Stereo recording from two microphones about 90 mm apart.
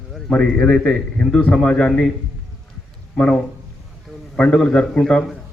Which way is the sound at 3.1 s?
10° left (ahead or behind).